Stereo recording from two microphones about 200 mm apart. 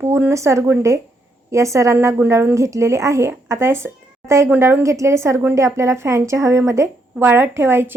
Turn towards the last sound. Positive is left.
turn(degrees=-10)  # may be behind; listen again after turning